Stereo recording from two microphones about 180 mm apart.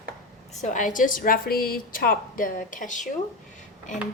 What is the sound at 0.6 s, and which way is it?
A woman's voice, 45° left (ahead or behind).